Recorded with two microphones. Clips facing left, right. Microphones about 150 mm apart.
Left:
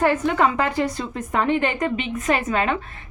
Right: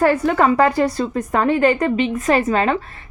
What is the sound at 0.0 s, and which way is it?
A woman's voice, 40° right (ahead or behind).